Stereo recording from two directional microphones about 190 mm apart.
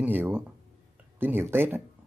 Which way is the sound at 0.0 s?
10° right (ahead or behind).